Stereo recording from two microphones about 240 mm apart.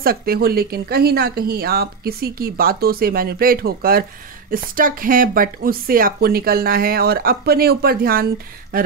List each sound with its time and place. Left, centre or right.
0.0 s a woman's voice: right